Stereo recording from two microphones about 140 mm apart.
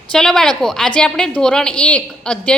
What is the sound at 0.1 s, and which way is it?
A woman's voice, 5° left (ahead or behind).